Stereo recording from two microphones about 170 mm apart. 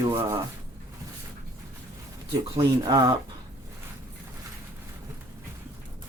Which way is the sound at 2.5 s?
25° right (ahead or behind).